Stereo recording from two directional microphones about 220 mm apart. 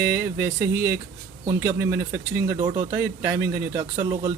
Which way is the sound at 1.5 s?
10° right (ahead or behind).